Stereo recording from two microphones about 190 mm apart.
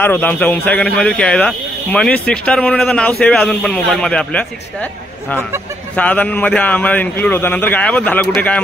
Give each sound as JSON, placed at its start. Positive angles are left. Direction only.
{"t": 0.0, "sound": "speech", "side_deg": 10}
{"t": 5.9, "sound": "speech", "side_deg": 5}